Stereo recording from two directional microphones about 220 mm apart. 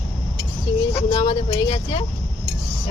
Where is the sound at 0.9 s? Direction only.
25° left (ahead or behind).